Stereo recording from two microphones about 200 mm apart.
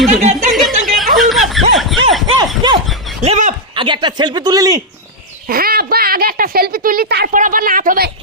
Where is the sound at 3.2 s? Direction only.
35° right (ahead or behind).